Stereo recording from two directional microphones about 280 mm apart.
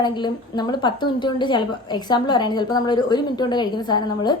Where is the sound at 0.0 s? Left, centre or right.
Centre.